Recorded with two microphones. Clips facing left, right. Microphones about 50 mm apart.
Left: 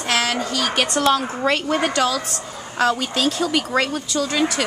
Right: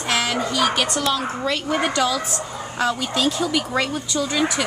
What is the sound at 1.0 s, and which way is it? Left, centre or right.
Speech, left.